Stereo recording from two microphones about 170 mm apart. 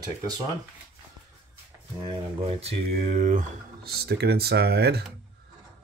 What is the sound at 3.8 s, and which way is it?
Speech, 65° right (ahead or behind).